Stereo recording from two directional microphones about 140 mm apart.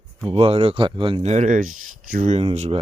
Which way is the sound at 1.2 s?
55° right (ahead or behind).